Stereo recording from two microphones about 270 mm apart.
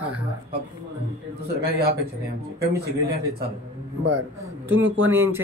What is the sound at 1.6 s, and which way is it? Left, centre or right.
Speech, right.